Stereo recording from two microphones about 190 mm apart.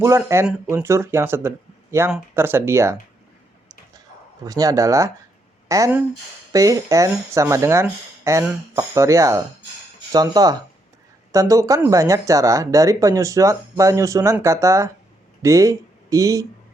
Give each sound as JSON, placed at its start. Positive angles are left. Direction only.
{"t": 0.0, "sound": "speech", "side_deg": -15}
{"t": 4.4, "sound": "speech", "side_deg": -20}